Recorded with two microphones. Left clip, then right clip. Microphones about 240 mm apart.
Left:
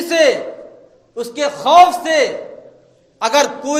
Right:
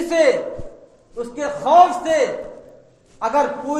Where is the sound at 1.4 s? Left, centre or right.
Left.